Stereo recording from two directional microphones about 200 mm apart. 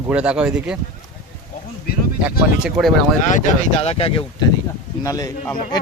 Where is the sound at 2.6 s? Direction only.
Centre (ahead or behind).